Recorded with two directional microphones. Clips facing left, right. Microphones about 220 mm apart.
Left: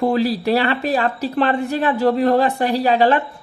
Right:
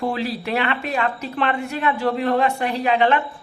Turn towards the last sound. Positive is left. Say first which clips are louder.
# left 3 dB
turn(degrees=35)  # may be behind; listen again after turning